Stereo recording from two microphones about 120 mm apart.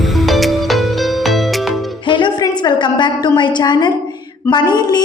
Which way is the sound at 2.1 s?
40° left (ahead or behind).